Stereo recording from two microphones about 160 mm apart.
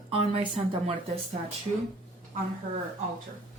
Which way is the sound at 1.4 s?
45° right (ahead or behind).